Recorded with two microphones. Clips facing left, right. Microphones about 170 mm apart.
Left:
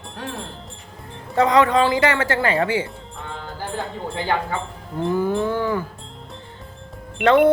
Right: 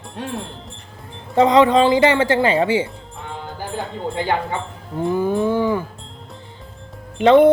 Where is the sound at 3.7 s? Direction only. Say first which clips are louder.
Right 4 dB; 20° right (ahead or behind).